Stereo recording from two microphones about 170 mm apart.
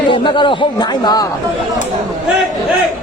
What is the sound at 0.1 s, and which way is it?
Speech, 30° left (ahead or behind).